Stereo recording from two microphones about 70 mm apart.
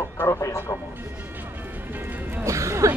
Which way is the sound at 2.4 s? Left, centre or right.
Right.